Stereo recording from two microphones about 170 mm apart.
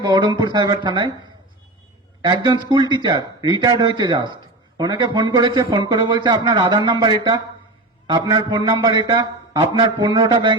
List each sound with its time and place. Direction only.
0.0 s a man's voice: 25° right (ahead or behind)
2.2 s a man's voice: 25° right (ahead or behind)